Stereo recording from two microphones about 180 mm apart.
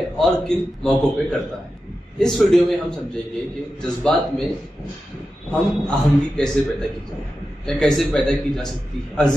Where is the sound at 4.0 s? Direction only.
5° left (ahead or behind).